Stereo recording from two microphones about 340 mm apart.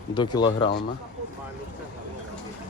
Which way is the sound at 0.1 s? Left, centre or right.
Centre.